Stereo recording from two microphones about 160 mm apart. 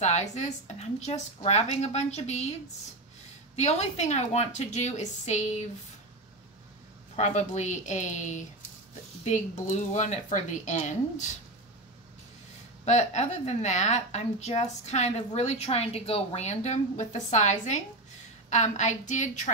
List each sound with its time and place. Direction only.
0.0 s a woman's voice: 45° left (ahead or behind)
3.5 s a woman's voice: 45° left (ahead or behind)
7.2 s a woman's voice: 45° left (ahead or behind)
12.8 s a woman's voice: 45° left (ahead or behind)